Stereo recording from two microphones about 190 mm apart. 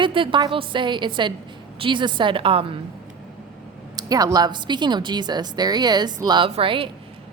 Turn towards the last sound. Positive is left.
turn(degrees=-30)  # may be behind; listen again after turning